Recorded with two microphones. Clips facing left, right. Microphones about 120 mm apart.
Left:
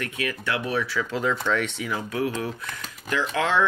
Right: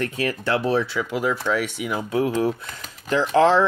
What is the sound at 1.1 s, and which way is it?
Speech, 10° right (ahead or behind).